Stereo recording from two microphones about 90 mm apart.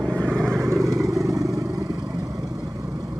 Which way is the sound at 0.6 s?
35° right (ahead or behind).